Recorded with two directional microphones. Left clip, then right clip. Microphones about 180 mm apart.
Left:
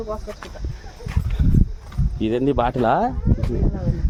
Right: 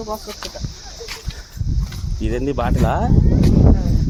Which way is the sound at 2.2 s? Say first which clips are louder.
Left 2 dB; 25° left (ahead or behind).